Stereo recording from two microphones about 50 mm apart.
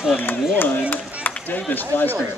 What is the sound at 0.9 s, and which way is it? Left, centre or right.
Speech, left.